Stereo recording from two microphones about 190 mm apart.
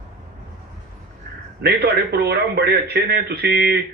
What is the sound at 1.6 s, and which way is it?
A man's voice, 60° right (ahead or behind).